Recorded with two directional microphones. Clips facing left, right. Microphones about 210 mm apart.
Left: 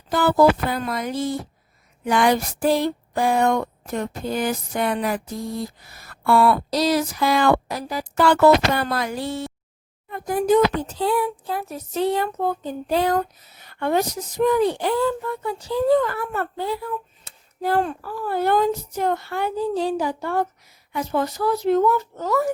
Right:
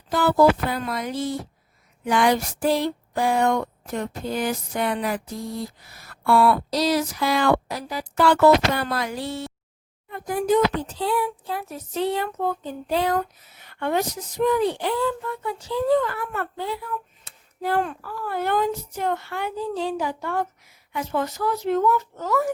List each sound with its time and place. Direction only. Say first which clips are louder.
0.1 s a child's voice: left 1 dB; 45° left (ahead or behind)